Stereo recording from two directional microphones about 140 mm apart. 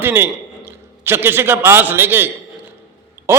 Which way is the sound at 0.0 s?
15° right (ahead or behind).